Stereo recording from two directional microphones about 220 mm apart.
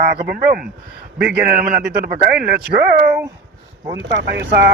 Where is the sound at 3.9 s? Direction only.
50° right (ahead or behind).